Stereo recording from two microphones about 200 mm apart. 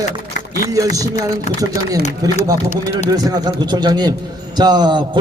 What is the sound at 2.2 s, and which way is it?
A man's voice, 15° right (ahead or behind).